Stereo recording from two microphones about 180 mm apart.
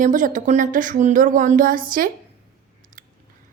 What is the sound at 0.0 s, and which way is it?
A woman's voice, 45° right (ahead or behind).